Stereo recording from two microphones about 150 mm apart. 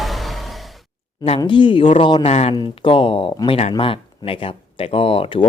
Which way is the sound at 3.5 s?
40° left (ahead or behind).